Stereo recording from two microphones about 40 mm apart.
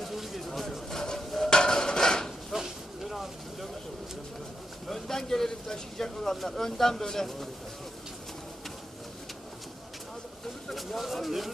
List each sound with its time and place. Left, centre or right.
0.0 s a sound: centre
0.9 s dishes: centre
2.5 s vehicle: centre
4.9 s speech: centre
10.7 s speech: centre